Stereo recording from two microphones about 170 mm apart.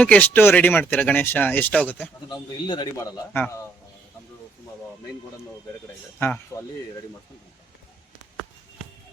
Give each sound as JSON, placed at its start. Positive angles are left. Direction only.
{"t": 0.0, "sound": "speech", "side_deg": 10}
{"t": 2.3, "sound": "a man's voice", "side_deg": 25}
{"t": 6.1, "sound": "speech", "side_deg": 10}